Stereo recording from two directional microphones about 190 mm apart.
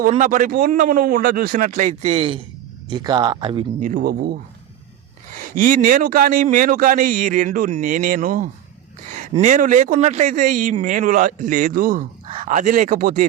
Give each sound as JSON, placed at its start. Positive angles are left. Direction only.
{"t": 0.0, "sound": "a man's voice", "side_deg": -40}
{"t": 3.8, "sound": "a man's voice", "side_deg": -45}